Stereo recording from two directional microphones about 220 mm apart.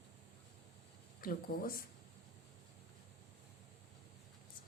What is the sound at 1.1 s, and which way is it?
Speech, 40° left (ahead or behind).